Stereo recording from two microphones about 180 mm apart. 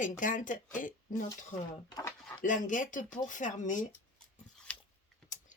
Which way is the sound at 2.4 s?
45° left (ahead or behind).